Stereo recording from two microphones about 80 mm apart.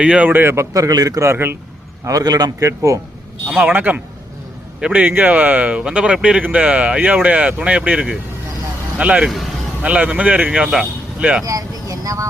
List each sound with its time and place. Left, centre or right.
0.0 s speech: centre
0.3 s speech: right
2.0 s a man's voice: right
3.5 s a man's voice: right
11.4 s speech: right